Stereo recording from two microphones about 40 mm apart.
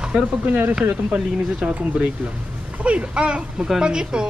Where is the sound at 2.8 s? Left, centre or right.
Right.